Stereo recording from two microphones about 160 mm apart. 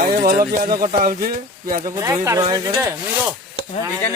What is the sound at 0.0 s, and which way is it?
Speech, 65° right (ahead or behind).